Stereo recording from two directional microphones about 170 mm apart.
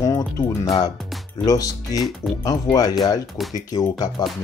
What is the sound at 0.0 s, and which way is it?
Music, 20° left (ahead or behind).